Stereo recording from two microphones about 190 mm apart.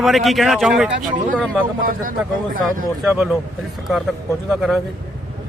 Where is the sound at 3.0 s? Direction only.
5° right (ahead or behind).